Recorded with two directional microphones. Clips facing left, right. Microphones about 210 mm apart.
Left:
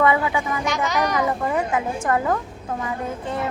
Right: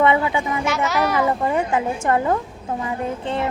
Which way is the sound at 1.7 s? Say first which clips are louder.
Right 2 dB; 25° right (ahead or behind).